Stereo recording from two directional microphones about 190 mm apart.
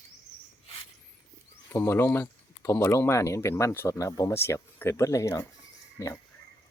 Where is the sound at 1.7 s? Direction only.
10° left (ahead or behind).